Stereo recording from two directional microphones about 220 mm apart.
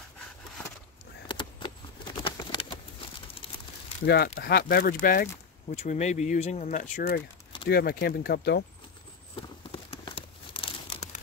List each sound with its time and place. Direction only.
1.2 s vehicle: 20° left (ahead or behind)
4.0 s speech: 45° left (ahead or behind)
9.3 s crumpling: 25° left (ahead or behind)